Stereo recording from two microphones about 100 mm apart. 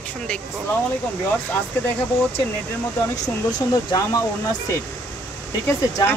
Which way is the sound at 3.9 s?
35° left (ahead or behind).